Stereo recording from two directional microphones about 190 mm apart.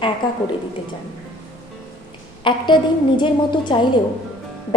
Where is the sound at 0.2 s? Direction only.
25° left (ahead or behind).